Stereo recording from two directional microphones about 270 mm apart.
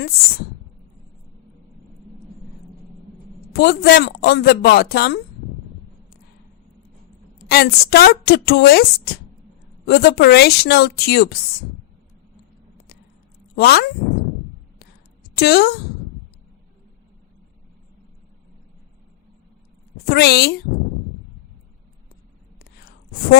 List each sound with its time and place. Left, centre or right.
0.0 s a woman's voice: left
3.5 s a woman's voice: left
7.3 s a woman's voice: left
13.6 s a woman's voice: left
15.4 s a woman's voice: left
20.1 s a woman's voice: left
22.5 s whispering: left